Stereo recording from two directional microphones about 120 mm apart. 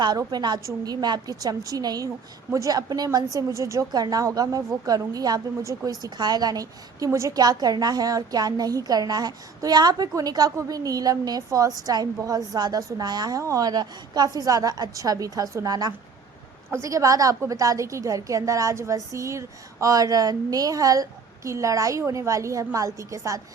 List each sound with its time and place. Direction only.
0.0 s a woman's voice: 35° right (ahead or behind)